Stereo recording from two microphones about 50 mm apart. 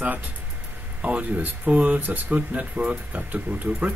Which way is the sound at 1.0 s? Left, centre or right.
Right.